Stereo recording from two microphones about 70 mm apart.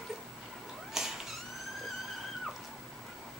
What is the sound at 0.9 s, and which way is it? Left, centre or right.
Cat, centre.